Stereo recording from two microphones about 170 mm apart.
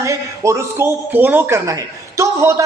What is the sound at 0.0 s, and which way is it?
A man's voice, 15° right (ahead or behind).